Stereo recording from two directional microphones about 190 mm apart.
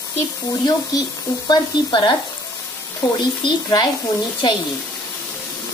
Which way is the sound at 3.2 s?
20° left (ahead or behind).